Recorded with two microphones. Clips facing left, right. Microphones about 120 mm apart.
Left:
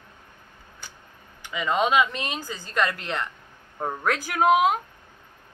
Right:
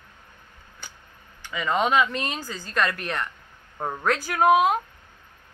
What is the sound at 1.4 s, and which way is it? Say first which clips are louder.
A woman's voice: even; 20° left (ahead or behind).